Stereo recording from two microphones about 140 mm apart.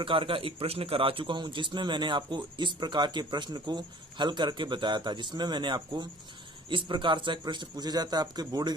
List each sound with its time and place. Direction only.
0.0 s a man's voice: 40° right (ahead or behind)